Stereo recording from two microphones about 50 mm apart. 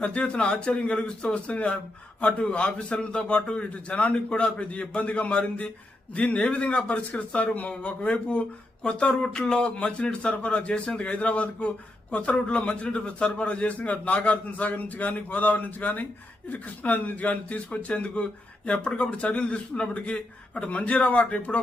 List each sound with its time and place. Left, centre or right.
0.0 s a man's voice: left